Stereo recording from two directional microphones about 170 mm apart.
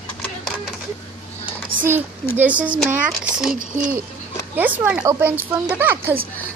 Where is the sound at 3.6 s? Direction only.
55° right (ahead or behind).